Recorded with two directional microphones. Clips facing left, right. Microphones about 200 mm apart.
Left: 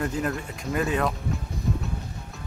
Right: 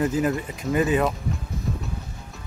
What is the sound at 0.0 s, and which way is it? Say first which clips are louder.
Speech: right 5 dB; 5° right (ahead or behind).